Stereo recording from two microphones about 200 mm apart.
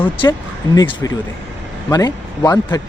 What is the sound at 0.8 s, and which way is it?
Speech, 20° left (ahead or behind).